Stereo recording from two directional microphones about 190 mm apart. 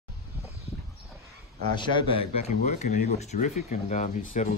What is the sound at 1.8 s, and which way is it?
Speech, 25° left (ahead or behind).